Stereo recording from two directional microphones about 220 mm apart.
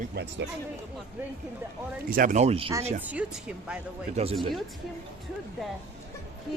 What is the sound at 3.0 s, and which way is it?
Speech, 5° right (ahead or behind).